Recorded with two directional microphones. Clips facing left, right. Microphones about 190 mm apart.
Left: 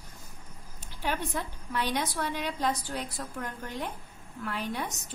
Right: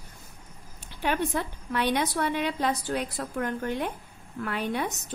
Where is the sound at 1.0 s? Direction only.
65° right (ahead or behind).